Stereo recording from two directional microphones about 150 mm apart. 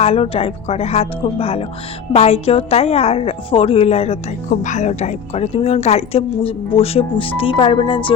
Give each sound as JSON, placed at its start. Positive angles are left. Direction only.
{"t": 0.0, "sound": "a woman's voice", "side_deg": 40}